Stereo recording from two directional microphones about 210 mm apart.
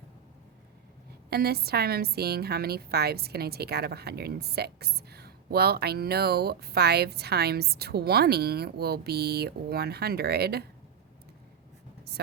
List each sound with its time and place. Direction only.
1.3 s a woman's voice: 50° right (ahead or behind)